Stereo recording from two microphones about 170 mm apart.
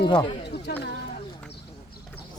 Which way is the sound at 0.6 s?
75° left (ahead or behind).